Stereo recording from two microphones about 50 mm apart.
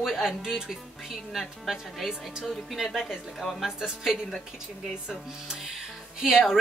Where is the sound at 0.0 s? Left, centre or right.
Centre.